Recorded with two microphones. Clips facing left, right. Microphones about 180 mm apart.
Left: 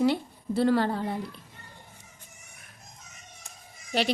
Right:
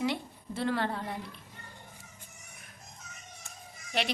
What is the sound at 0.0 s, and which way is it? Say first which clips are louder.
A woman's voice: left 7 dB; 35° left (ahead or behind).